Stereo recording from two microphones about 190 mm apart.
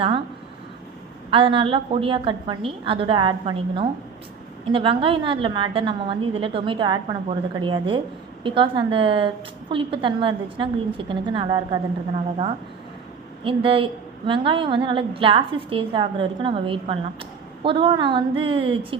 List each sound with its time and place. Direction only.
1.3 s a woman's voice: 25° right (ahead or behind)
13.4 s a woman's voice: 30° right (ahead or behind)